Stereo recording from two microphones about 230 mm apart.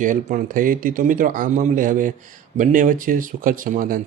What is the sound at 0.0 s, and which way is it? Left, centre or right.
Speech, right.